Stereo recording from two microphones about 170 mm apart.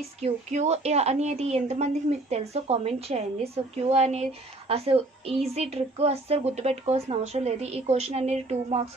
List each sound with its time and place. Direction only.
0.2 s a woman's voice: 40° right (ahead or behind)